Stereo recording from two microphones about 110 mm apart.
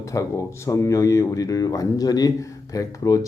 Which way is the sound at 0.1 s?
30° left (ahead or behind).